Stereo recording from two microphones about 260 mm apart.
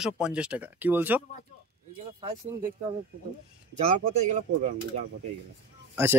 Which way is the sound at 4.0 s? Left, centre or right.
Right.